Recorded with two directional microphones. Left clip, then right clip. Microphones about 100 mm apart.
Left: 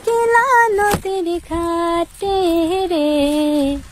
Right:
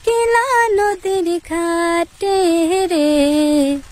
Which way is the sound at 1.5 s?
35° right (ahead or behind).